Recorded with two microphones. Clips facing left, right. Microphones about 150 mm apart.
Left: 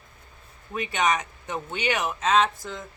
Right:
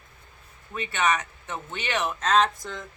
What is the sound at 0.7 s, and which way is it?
Speech, 15° left (ahead or behind).